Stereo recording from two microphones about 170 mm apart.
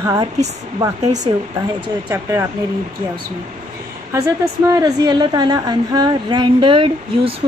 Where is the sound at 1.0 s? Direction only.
45° right (ahead or behind).